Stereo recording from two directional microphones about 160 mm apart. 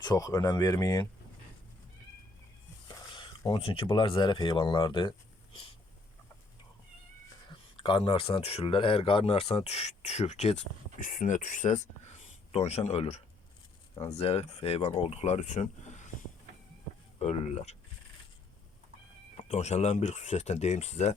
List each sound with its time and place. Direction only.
0.0 s speech: 25° left (ahead or behind)
2.9 s speech: 30° left (ahead or behind)
7.8 s speech: 30° left (ahead or behind)
11.0 s speech: 60° left (ahead or behind)
17.2 s speech: 45° left (ahead or behind)
19.5 s speech: 45° left (ahead or behind)